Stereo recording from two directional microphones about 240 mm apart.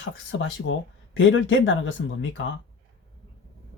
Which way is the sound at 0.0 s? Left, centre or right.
Left.